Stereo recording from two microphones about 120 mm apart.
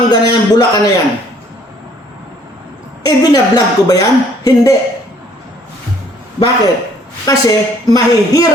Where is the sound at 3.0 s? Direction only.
35° left (ahead or behind).